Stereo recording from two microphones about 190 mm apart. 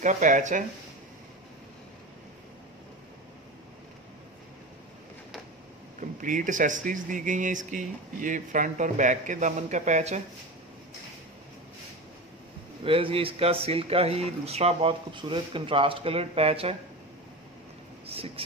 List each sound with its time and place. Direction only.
0.0 s speech: 40° right (ahead or behind)
5.9 s speech: 45° right (ahead or behind)
12.8 s speech: 30° right (ahead or behind)
18.0 s speech: 30° right (ahead or behind)